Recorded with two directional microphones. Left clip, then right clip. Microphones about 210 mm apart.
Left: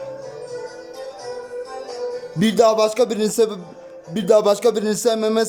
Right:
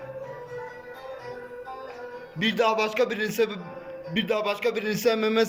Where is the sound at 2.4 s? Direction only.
25° left (ahead or behind).